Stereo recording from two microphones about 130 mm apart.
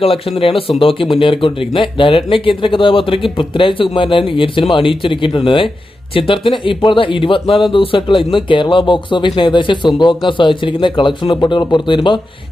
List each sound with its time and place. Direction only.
0.0 s speech: 45° left (ahead or behind)